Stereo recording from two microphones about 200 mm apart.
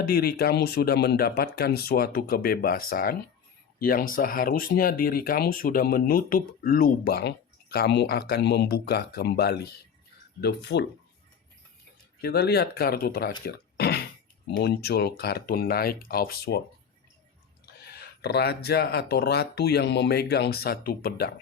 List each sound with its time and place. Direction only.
0.0 s speech: 50° left (ahead or behind)
12.2 s speech: 50° left (ahead or behind)
17.7 s speech: 50° left (ahead or behind)